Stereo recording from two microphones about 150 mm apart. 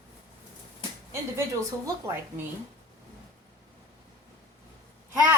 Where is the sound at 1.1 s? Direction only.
20° right (ahead or behind).